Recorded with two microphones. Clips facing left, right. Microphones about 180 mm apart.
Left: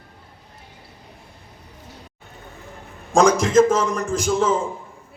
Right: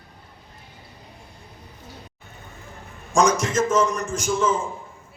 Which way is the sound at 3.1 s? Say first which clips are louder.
Left 4 dB; 60° left (ahead or behind).